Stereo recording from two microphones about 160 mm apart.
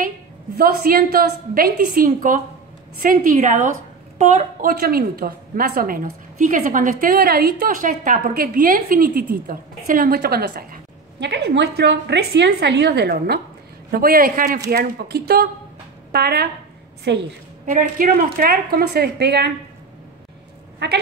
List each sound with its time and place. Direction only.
0.6 s a woman's voice: 65° right (ahead or behind); by 13.4 s 90° right
13.9 s a woman's voice: 65° right (ahead or behind)
14.7 s a woman's voice: 80° right
17.1 s a woman's voice: 90° right
17.6 s a woman's voice: 60° right (ahead or behind); by 19.5 s 90° right
20.8 s a woman's voice: 90° right